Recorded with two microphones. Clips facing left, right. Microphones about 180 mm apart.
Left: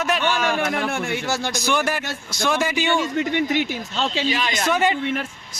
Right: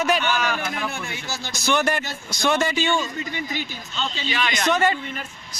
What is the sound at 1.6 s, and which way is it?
Speech, 5° left (ahead or behind).